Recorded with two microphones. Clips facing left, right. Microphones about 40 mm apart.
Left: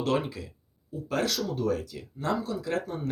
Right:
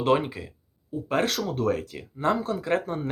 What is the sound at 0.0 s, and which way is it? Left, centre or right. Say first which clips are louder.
Speech: right 5 dB; right.